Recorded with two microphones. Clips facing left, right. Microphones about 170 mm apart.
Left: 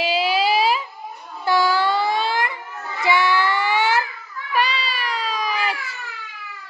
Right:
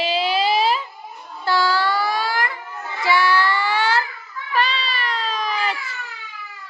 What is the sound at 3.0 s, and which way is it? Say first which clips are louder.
Baby cry: even; 20° left (ahead or behind).